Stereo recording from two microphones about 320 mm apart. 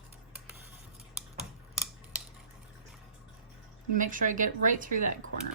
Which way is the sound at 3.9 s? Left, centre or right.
Right.